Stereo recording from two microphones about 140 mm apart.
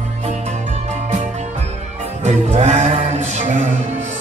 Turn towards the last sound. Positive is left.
turn(degrees=-55)  # may be behind; listen again after turning